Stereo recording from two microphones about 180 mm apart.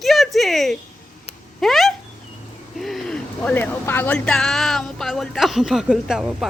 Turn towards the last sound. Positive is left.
turn(degrees=-5)  # may be behind; listen again after turning